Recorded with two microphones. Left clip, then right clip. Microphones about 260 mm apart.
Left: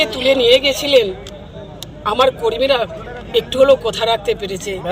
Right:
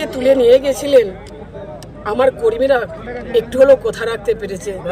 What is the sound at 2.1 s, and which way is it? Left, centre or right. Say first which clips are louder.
Speech: even; centre.